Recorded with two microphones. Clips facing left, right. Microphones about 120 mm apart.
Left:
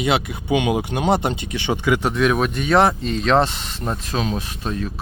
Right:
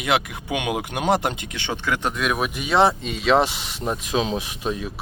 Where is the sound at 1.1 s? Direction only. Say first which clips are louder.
Left 1 dB; 10° left (ahead or behind).